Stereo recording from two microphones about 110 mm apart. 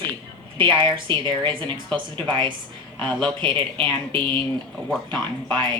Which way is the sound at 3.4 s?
50° right (ahead or behind).